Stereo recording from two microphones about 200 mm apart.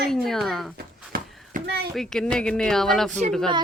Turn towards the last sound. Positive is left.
turn(degrees=-35)  # may be behind; listen again after turning